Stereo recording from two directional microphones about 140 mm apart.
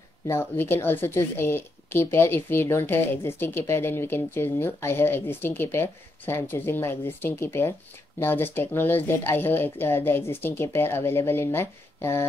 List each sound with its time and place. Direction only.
0.3 s a woman's voice: 15° left (ahead or behind)